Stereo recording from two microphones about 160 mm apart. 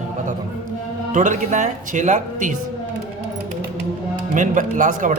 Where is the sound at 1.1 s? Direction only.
50° right (ahead or behind).